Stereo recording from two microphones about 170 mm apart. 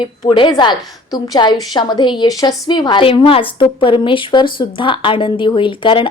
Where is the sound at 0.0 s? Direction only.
30° left (ahead or behind).